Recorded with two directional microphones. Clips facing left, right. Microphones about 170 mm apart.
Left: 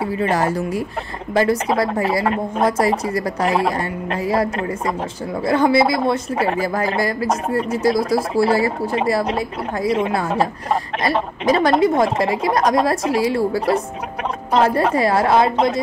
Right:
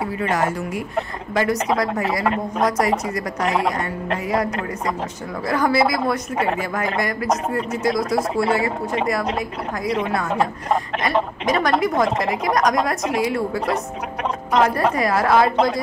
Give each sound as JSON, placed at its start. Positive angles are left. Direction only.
{"t": 0.0, "sound": "a woman's voice", "side_deg": 30}